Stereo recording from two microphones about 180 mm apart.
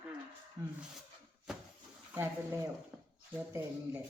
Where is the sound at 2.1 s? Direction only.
15° right (ahead or behind).